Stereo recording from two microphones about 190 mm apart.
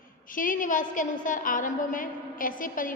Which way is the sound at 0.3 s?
45° left (ahead or behind).